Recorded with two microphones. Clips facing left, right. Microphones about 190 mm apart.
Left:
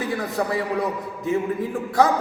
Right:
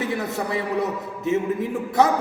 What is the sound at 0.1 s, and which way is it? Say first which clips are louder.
A man's voice: left 1 dB; 25° right (ahead or behind).